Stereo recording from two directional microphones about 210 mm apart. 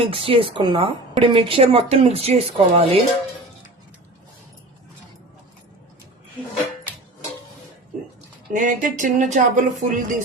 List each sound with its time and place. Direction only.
0.0 s a woman's voice: 25° right (ahead or behind)
8.5 s speech: 40° right (ahead or behind)